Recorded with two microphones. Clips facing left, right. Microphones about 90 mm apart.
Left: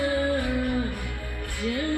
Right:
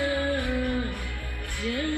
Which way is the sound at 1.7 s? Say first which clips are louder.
Left 1 dB; 20° left (ahead or behind).